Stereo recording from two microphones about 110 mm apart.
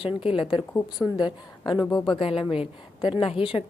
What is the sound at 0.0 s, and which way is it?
A woman's voice, 55° left (ahead or behind).